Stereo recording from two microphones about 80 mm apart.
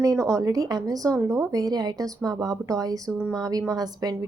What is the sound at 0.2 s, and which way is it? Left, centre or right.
A woman's voice, right.